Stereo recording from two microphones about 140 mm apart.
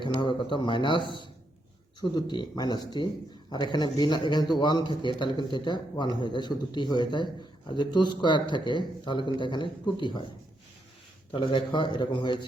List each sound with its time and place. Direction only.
0.0 s a man's voice: 35° left (ahead or behind)
11.3 s a man's voice: 35° left (ahead or behind)